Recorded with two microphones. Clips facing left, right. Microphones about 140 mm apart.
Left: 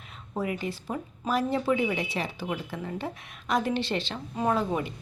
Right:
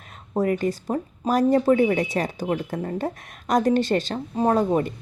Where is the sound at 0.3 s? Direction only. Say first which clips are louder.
Right 8 dB; 45° right (ahead or behind).